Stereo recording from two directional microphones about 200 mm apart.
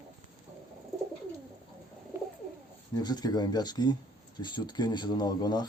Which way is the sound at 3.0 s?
20° left (ahead or behind).